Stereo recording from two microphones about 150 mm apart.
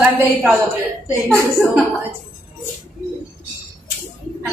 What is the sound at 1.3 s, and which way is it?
Speech, 20° right (ahead or behind).